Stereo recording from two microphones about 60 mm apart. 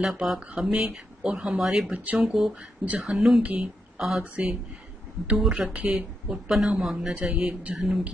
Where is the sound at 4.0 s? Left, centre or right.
Centre.